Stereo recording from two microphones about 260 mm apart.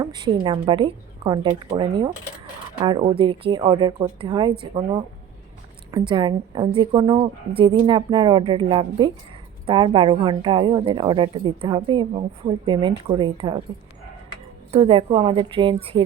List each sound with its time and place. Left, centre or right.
0.0 s a woman's voice: centre
14.7 s a woman's voice: right